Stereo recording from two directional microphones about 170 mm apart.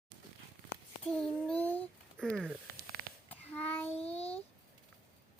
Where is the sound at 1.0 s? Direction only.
5° left (ahead or behind).